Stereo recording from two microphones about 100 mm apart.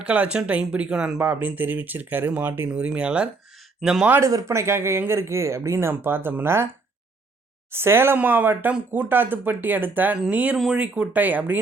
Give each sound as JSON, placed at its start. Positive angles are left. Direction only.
{"t": 0.0, "sound": "speech", "side_deg": -10}
{"t": 4.2, "sound": "speech", "side_deg": -30}
{"t": 7.7, "sound": "speech", "side_deg": -25}